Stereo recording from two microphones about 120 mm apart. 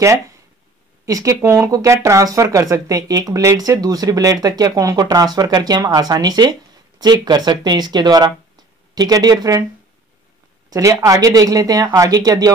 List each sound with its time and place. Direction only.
1.0 s speech: 30° right (ahead or behind)
10.7 s speech: 25° right (ahead or behind)